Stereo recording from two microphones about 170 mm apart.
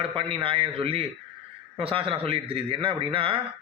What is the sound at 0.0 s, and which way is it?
Speech, 30° right (ahead or behind).